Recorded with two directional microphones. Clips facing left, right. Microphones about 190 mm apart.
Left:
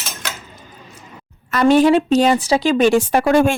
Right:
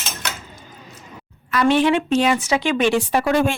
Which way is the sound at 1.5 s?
40° left (ahead or behind).